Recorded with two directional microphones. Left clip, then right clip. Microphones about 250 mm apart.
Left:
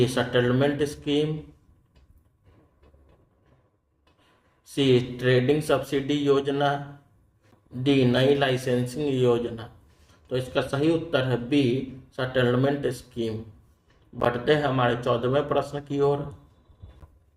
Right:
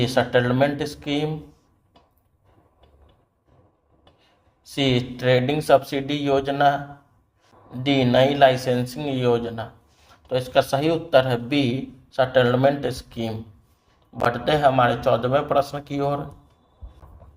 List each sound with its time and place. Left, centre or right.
0.0 s speech: centre
4.7 s speech: right